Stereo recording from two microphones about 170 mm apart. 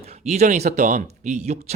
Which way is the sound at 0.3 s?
40° right (ahead or behind).